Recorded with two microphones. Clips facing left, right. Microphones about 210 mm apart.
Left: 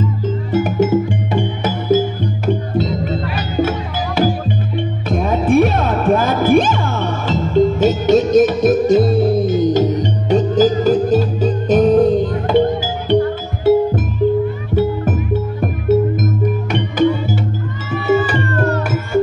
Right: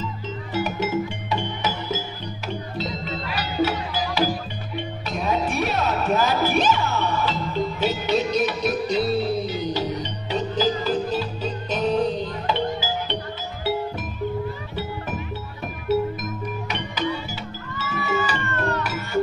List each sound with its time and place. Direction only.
0.0 s music: 50° left (ahead or behind)
15.6 s music: 50° left (ahead or behind)
18.4 s music: 40° left (ahead or behind)